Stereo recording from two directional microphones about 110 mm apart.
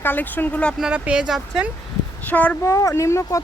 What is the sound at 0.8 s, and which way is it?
Speech, 10° right (ahead or behind).